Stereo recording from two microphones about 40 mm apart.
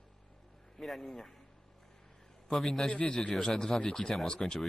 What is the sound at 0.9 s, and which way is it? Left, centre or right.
Speech, centre.